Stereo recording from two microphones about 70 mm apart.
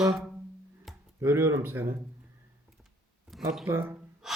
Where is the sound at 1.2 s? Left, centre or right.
Right.